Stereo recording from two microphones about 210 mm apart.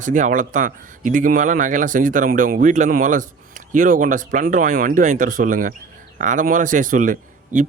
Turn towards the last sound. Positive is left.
turn(degrees=-35)  # may be behind; listen again after turning